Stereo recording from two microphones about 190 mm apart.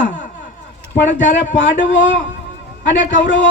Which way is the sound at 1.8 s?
75° left (ahead or behind).